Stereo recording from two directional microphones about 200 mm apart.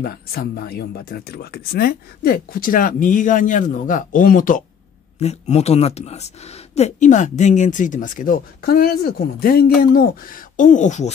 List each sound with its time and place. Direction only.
0.0 s speech: 50° left (ahead or behind)